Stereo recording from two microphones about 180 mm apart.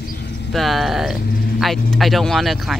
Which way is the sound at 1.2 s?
55° left (ahead or behind).